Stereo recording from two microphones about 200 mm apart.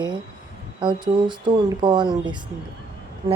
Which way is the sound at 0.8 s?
25° right (ahead or behind).